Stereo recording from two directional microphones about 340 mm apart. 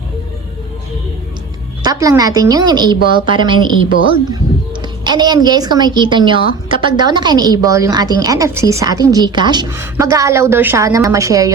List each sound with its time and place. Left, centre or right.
1.8 s a woman's voice: centre
3.0 s a woman's voice: left
3.3 s a woman's voice: centre
3.8 s a woman's voice: left
4.1 s a woman's voice: centre